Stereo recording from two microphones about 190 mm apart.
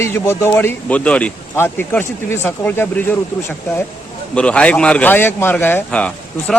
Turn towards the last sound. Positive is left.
turn(degrees=5)  # may be behind; listen again after turning